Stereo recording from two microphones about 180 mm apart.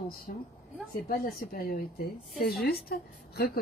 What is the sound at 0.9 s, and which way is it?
A woman's voice, 55° left (ahead or behind).